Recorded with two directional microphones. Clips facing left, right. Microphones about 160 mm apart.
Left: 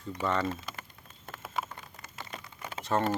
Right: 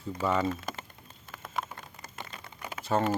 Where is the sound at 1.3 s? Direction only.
Centre (ahead or behind).